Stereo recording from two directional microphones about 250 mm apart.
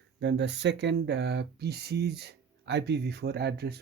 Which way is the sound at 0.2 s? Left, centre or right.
Right.